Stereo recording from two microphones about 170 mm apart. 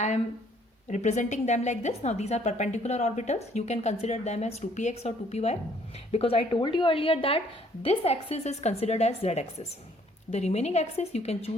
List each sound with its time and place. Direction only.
0.9 s a woman's voice: 45° left (ahead or behind)